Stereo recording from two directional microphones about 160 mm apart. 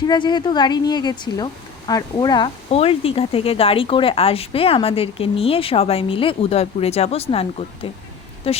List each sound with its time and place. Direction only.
0.0 s a woman's voice: 25° left (ahead or behind)
2.6 s speech: 40° left (ahead or behind)
8.4 s speech: 40° left (ahead or behind)